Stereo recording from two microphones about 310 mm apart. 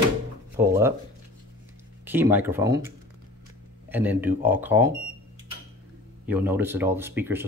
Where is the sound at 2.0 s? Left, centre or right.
Centre.